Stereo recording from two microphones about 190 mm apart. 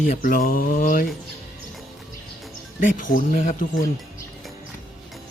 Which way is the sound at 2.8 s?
45° left (ahead or behind).